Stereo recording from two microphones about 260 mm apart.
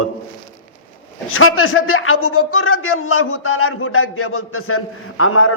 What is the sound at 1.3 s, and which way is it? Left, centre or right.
A man's voice, left.